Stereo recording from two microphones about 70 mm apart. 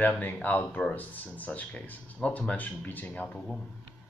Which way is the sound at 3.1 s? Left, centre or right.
Centre.